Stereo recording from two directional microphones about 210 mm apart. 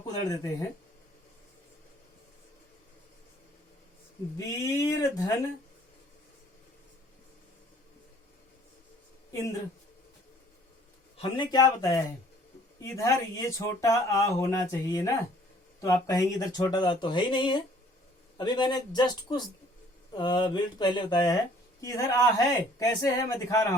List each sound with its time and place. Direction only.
0.3 s speech: 15° left (ahead or behind)
4.4 s speech: 15° left (ahead or behind)
11.2 s speech: 20° left (ahead or behind)